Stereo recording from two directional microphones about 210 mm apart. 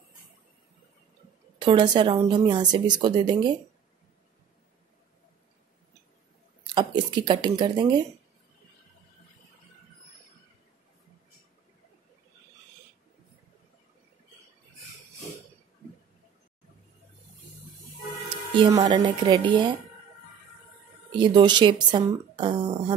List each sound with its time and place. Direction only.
1.6 s speech: 25° right (ahead or behind)
6.7 s speech: 20° right (ahead or behind)
18.8 s speech: 25° right (ahead or behind)
21.2 s speech: 20° right (ahead or behind)